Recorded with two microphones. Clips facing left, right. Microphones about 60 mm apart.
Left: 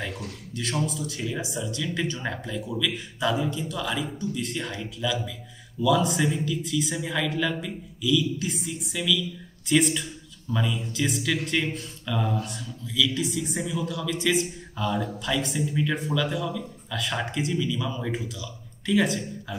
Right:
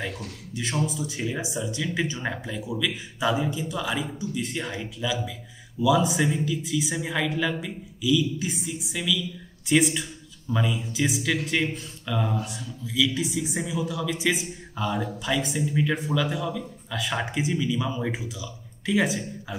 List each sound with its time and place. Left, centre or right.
0.5 s a man's voice: centre